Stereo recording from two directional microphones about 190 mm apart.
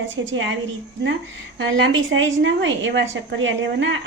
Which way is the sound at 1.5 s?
80° right.